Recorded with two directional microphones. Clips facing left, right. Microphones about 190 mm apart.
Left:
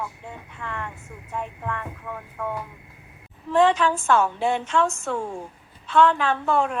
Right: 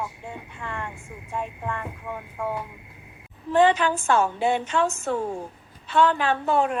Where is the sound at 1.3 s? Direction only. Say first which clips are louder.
Even; 30° right (ahead or behind).